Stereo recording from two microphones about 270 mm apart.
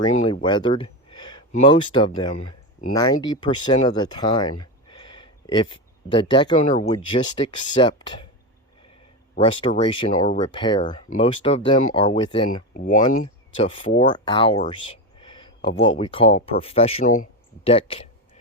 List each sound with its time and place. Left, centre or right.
0.3 s speech: centre
9.4 s speech: centre
15.2 s a sound: centre
16.0 s speech: centre